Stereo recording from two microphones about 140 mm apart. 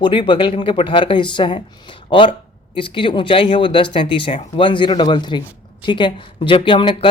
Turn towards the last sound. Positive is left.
turn(degrees=40)  # may be behind; listen again after turning